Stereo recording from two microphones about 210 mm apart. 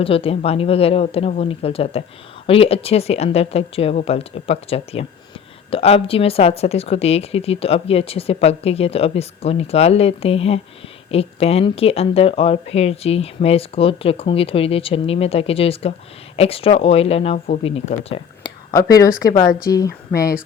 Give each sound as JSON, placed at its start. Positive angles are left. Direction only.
{"t": 0.0, "sound": "speech", "side_deg": 25}
{"t": 18.8, "sound": "speech", "side_deg": 15}